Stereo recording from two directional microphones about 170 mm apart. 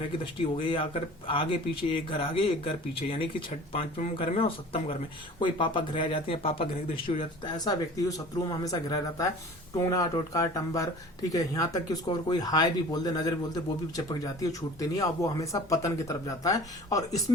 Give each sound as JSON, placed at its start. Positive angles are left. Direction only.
{"t": 0.6, "sound": "speech", "side_deg": 30}